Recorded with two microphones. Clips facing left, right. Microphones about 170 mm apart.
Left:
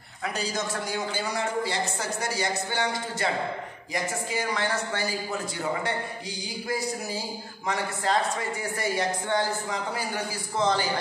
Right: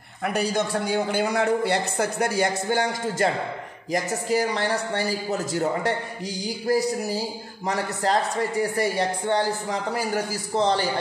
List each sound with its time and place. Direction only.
0.2 s a man's voice: 60° right (ahead or behind); by 10.9 s 35° right (ahead or behind)